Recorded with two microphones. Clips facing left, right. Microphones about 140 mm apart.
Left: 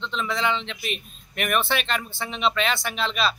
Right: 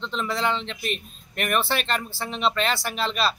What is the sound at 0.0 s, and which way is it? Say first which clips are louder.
A man's voice: even; centre (ahead or behind).